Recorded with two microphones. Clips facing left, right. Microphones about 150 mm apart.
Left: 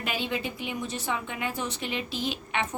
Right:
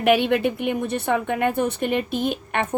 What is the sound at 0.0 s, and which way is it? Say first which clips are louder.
A woman's voice: right 13 dB; 65° right (ahead or behind).